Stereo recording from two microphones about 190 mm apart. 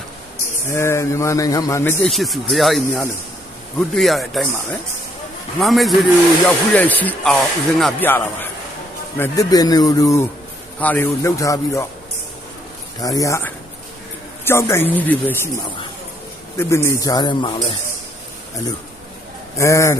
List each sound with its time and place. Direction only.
0.7 s a man's voice: 15° left (ahead or behind)
5.5 s a man's voice: centre (ahead or behind); by 11.9 s 15° left (ahead or behind)
13.1 s a man's voice: 15° left (ahead or behind)
19.5 s a man's voice: 15° left (ahead or behind)